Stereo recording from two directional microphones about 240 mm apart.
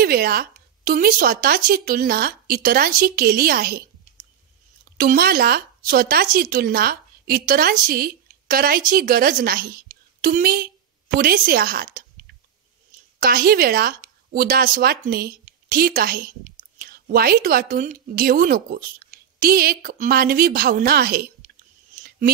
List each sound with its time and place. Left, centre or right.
0.0 s a woman's voice: right
4.9 s a woman's voice: right
13.2 s speech: right